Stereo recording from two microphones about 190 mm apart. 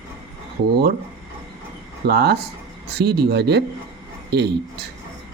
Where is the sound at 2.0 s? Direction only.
60° right (ahead or behind).